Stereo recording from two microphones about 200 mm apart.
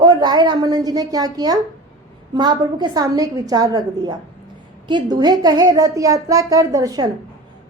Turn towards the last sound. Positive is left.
turn(degrees=-15)  # may be behind; listen again after turning